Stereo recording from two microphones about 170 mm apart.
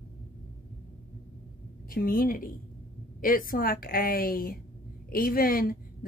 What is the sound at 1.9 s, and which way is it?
A woman's voice, 60° left (ahead or behind).